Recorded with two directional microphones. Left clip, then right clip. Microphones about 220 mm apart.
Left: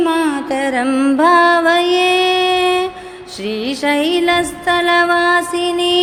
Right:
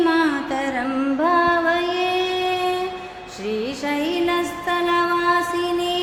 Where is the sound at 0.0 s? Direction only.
30° left (ahead or behind).